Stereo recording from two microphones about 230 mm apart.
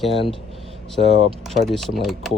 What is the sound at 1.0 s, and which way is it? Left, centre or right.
Speech, right.